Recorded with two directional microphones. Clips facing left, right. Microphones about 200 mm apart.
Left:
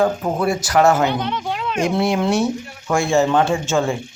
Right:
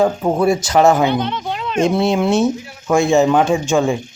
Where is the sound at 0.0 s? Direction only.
20° right (ahead or behind).